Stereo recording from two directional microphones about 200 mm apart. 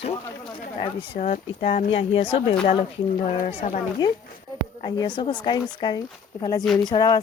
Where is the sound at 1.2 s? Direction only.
30° left (ahead or behind).